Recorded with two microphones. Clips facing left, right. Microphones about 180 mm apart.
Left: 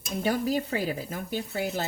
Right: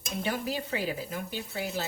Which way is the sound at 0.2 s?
40° left (ahead or behind).